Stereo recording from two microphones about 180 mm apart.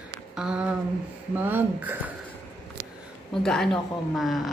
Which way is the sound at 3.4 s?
5° left (ahead or behind).